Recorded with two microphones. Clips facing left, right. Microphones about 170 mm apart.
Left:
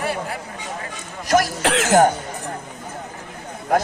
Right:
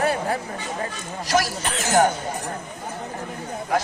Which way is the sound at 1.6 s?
80° left.